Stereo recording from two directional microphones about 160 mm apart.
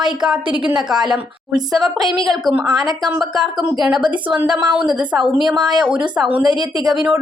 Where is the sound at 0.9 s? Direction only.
Centre (ahead or behind).